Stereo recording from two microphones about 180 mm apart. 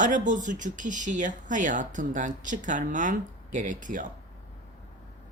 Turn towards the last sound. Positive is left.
turn(degrees=-45)  # may be behind; listen again after turning